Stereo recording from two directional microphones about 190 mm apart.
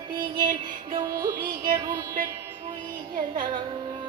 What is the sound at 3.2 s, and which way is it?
Music, 25° right (ahead or behind).